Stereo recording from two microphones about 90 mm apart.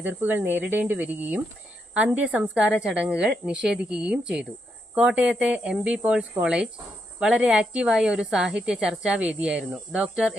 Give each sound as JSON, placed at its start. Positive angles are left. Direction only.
{"t": 0.0, "sound": "a woman's voice", "side_deg": -20}